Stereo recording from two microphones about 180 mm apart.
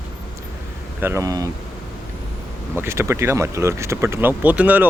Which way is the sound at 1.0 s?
15° right (ahead or behind).